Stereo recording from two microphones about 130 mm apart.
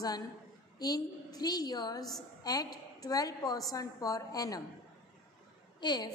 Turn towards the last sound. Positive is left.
turn(degrees=35)  # may be behind; listen again after turning